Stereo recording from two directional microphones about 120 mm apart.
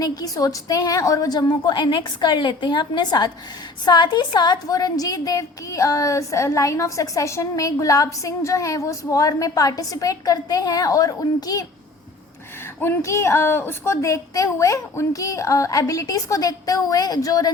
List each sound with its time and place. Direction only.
0.0 s a woman's voice: 30° left (ahead or behind)
12.8 s a woman's voice: 25° left (ahead or behind)